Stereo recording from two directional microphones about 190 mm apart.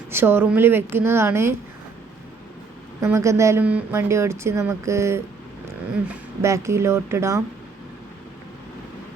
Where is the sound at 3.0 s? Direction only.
15° right (ahead or behind).